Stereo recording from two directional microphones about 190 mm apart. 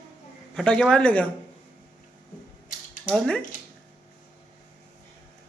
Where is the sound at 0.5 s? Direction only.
5° left (ahead or behind).